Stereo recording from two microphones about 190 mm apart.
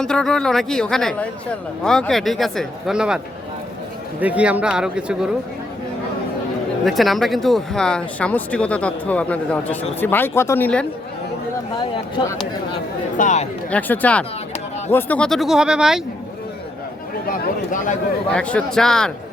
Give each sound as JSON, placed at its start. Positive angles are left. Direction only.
{"t": 0.0, "sound": "speech", "side_deg": 5}
{"t": 4.2, "sound": "speech", "side_deg": -5}
{"t": 6.8, "sound": "speech", "side_deg": 0}
{"t": 12.2, "sound": "speech", "side_deg": 25}
{"t": 13.1, "sound": "speech", "side_deg": 40}
{"t": 13.7, "sound": "speech", "side_deg": 10}
{"t": 17.2, "sound": "speech", "side_deg": 45}
{"t": 18.3, "sound": "speech", "side_deg": 5}